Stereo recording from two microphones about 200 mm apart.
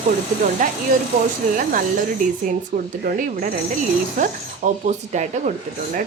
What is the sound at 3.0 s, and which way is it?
Speech, 45° right (ahead or behind).